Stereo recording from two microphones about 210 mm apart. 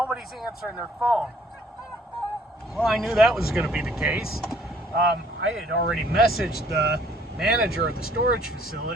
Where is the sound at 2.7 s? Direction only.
Centre (ahead or behind).